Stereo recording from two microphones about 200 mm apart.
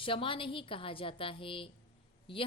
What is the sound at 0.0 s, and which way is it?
Speech, 25° left (ahead or behind).